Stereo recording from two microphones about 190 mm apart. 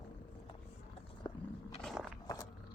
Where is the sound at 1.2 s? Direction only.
25° left (ahead or behind).